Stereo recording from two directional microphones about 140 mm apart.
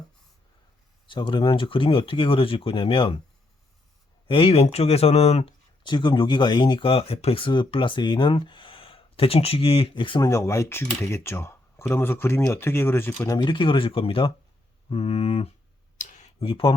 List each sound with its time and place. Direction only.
1.0 s speech: 35° left (ahead or behind)
4.3 s speech: 40° left (ahead or behind)
5.8 s speech: 35° left (ahead or behind)
10.2 s speech: 20° left (ahead or behind)
13.2 s speech: 30° left (ahead or behind); by 15.5 s 45° left (ahead or behind)
16.0 s clicking: 60° left (ahead or behind)
16.4 s speech: 40° left (ahead or behind)